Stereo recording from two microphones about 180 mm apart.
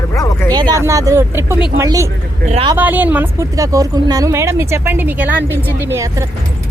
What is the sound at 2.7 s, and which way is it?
A woman's voice, 10° right (ahead or behind).